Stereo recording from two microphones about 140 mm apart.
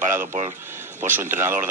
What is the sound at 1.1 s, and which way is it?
Speech, 15° right (ahead or behind).